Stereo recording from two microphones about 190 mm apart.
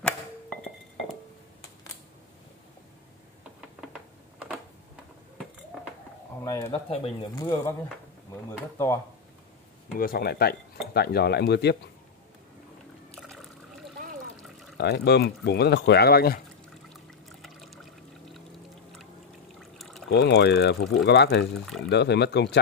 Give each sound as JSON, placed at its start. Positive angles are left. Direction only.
{"t": 0.0, "sound": "a sound", "side_deg": 5}
{"t": 6.4, "sound": "speech", "side_deg": 15}
{"t": 6.7, "sound": "speech", "side_deg": 25}
{"t": 9.9, "sound": "speech", "side_deg": 50}
{"t": 13.1, "sound": "water", "side_deg": 0}
{"t": 14.4, "sound": "pour", "side_deg": 0}
{"t": 14.8, "sound": "speech", "side_deg": 60}
{"t": 16.9, "sound": "trickle", "side_deg": 0}
{"t": 19.6, "sound": "pour", "side_deg": 0}
{"t": 20.1, "sound": "speech", "side_deg": 65}